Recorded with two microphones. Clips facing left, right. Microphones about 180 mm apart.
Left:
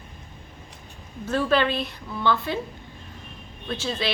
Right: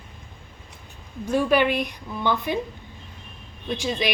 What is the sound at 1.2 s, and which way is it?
Speech, 15° right (ahead or behind).